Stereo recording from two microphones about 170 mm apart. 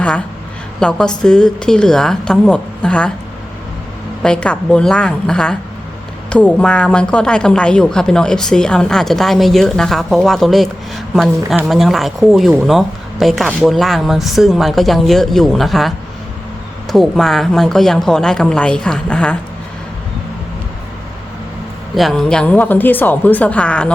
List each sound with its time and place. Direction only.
0.8 s a woman's voice: 5° left (ahead or behind)
4.2 s a woman's voice: 5° left (ahead or behind)
16.9 s a woman's voice: centre (ahead or behind)
21.9 s speech: centre (ahead or behind)